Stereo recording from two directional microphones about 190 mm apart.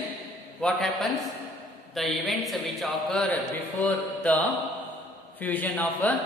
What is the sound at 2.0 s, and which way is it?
A man's voice, centre (ahead or behind).